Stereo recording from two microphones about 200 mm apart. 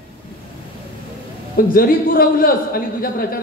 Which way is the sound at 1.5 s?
45° left (ahead or behind).